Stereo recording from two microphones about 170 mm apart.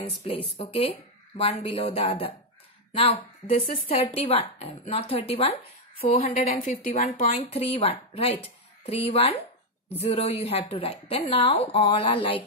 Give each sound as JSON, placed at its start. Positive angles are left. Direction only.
{"t": 0.0, "sound": "speech", "side_deg": 35}
{"t": 5.9, "sound": "a woman's voice", "side_deg": 60}
{"t": 7.1, "sound": "speech", "side_deg": 35}